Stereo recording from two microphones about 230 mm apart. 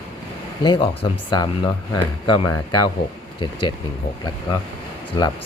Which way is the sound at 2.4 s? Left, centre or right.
Left.